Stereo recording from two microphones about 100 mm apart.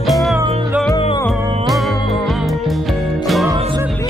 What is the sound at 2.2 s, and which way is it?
Music, centre (ahead or behind).